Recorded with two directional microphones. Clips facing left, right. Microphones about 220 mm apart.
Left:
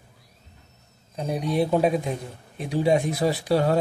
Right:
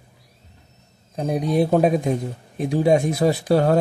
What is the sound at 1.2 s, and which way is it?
A man's voice, 50° right (ahead or behind).